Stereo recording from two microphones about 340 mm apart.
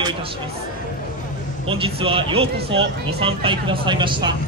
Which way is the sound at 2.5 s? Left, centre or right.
Right.